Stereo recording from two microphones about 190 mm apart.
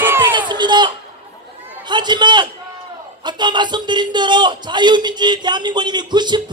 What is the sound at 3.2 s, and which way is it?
A man's voice, 25° right (ahead or behind).